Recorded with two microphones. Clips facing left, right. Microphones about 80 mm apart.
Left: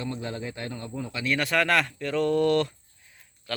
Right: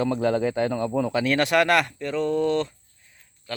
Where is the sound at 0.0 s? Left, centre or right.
Right.